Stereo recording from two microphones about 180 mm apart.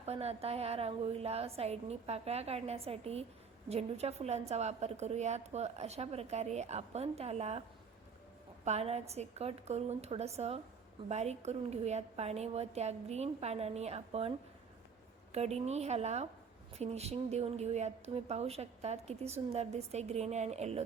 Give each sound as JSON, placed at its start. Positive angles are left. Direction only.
{"t": 0.0, "sound": "a woman's voice", "side_deg": -35}
{"t": 8.6, "sound": "a woman's voice", "side_deg": -35}